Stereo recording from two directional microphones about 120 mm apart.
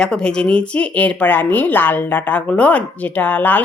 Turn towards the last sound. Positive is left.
turn(degrees=15)  # may be behind; listen again after turning